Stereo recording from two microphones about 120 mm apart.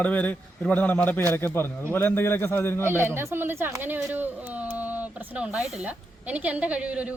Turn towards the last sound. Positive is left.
turn(degrees=-10)  # may be behind; listen again after turning